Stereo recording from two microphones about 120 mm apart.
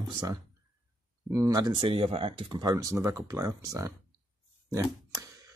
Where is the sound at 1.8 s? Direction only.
50° right (ahead or behind); by 3.9 s 25° right (ahead or behind).